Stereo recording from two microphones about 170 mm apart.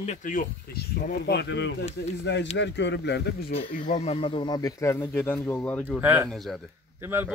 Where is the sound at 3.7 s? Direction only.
50° left (ahead or behind); by 5.8 s 10° left (ahead or behind).